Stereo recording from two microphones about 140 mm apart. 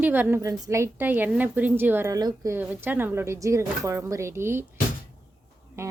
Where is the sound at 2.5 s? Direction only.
15° right (ahead or behind).